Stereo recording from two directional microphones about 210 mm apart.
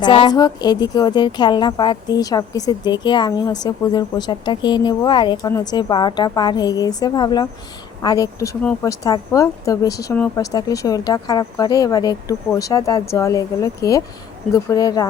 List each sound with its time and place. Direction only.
0.0 s a woman's voice: 25° left (ahead or behind)